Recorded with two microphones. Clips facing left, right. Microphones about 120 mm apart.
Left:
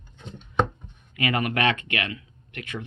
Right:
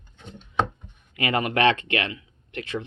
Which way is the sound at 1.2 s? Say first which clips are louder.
Right 3 dB; 30° right (ahead or behind).